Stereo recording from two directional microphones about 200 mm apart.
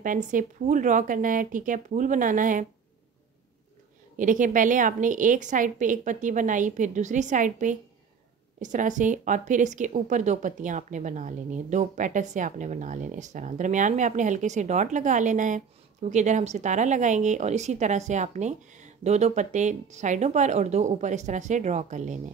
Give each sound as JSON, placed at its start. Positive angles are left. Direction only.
{"t": 0.0, "sound": "speech", "side_deg": -40}
{"t": 4.2, "sound": "speech", "side_deg": -40}